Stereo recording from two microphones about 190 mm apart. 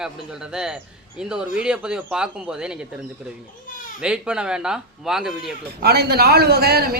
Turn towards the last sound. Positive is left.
turn(degrees=-55)  # may be behind; listen again after turning